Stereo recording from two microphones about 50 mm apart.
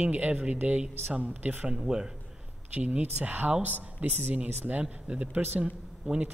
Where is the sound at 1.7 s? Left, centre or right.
Centre.